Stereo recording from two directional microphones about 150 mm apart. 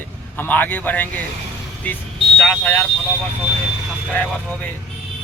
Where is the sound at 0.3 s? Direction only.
10° left (ahead or behind).